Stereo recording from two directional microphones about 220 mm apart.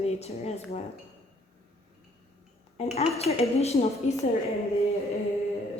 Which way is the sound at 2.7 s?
30° left (ahead or behind).